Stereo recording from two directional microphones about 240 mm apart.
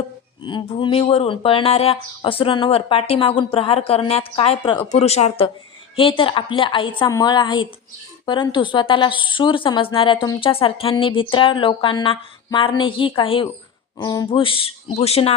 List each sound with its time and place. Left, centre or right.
0.4 s a woman's voice: centre